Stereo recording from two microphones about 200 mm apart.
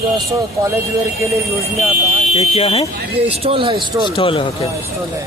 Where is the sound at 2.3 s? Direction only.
30° left (ahead or behind).